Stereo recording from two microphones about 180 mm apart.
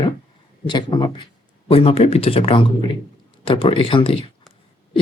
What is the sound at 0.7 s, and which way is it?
Speech, 25° left (ahead or behind).